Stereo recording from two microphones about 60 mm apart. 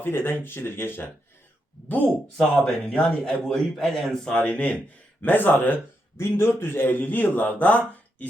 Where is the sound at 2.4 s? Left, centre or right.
Centre.